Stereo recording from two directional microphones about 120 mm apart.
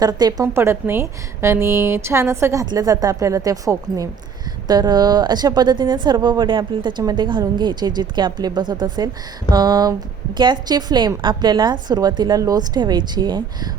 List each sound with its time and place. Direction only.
0.0 s speech: 35° right (ahead or behind)
0.4 s a woman's voice: 20° right (ahead or behind); by 13.4 s 35° right (ahead or behind)